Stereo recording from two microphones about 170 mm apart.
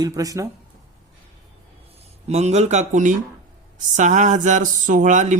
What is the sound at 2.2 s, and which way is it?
Speech, 40° right (ahead or behind).